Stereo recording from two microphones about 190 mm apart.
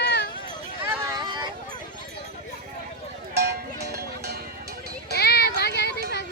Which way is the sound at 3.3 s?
60° right (ahead or behind).